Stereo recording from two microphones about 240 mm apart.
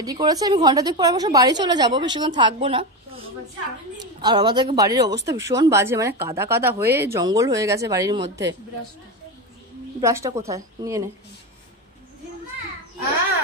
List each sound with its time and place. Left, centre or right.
0.0 s speech: centre
4.0 s speech: centre
9.9 s speech: centre